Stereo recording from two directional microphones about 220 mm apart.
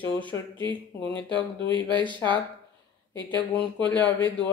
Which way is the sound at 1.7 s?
20° right (ahead or behind).